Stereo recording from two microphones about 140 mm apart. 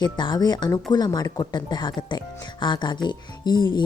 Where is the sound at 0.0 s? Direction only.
30° left (ahead or behind).